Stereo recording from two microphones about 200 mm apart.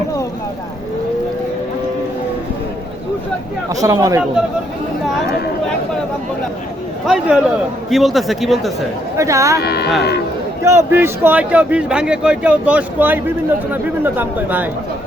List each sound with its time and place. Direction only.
3.8 s speech: 15° right (ahead or behind)
7.1 s speech: 5° right (ahead or behind)
9.1 s speech: 15° right (ahead or behind)
9.6 s speech: 55° left (ahead or behind)
10.6 s speech: 15° right (ahead or behind)